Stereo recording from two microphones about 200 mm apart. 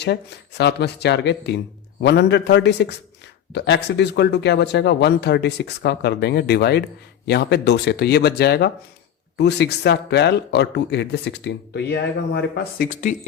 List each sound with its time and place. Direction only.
0.0 s speech: 55° left (ahead or behind); by 13.1 s 40° left (ahead or behind)